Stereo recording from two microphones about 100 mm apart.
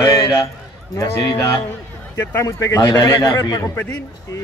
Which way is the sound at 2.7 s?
50° left (ahead or behind).